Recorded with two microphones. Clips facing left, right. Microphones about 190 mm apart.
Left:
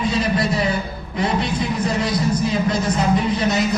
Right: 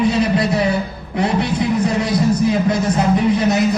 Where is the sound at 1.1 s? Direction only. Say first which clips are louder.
Right 3 dB; 65° right (ahead or behind).